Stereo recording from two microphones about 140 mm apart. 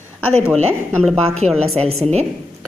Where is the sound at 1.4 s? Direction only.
50° right (ahead or behind).